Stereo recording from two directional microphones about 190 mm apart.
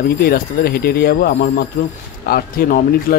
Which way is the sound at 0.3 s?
55° left (ahead or behind).